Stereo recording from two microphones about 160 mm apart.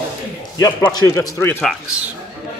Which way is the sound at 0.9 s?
20° left (ahead or behind).